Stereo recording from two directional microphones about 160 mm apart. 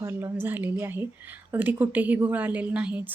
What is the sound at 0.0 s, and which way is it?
Speech, 15° right (ahead or behind).